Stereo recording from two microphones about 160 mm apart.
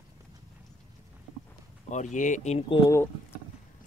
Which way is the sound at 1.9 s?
50° left (ahead or behind).